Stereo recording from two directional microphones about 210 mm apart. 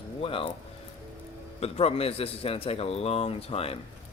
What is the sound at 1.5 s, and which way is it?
A man's voice, 30° left (ahead or behind).